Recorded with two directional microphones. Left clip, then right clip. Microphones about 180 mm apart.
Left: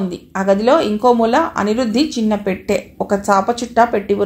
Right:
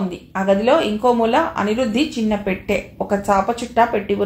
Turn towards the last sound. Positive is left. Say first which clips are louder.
# left 3 dB
turn(degrees=40)  # may be behind; listen again after turning